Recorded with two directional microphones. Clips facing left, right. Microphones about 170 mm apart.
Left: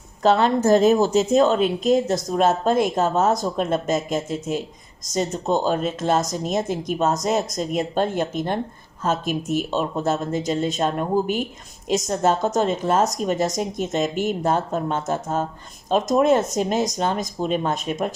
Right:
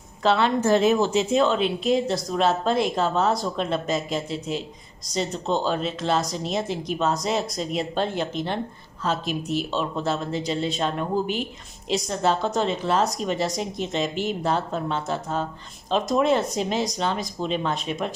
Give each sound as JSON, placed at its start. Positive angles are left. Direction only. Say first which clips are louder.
{"t": 0.2, "sound": "a woman's voice", "louder": "left 3 dB", "side_deg": 40}